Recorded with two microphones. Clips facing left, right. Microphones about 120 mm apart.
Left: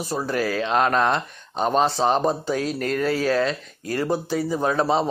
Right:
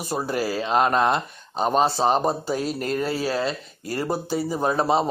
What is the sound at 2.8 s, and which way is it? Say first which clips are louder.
Speech: left 4 dB; 35° right (ahead or behind).